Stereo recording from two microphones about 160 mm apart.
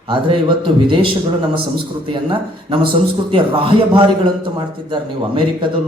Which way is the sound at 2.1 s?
30° right (ahead or behind).